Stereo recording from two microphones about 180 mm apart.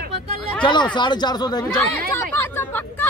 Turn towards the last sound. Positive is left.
turn(degrees=10)  # may be behind; listen again after turning